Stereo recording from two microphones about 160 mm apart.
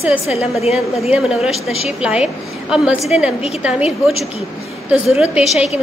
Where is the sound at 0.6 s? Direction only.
40° left (ahead or behind).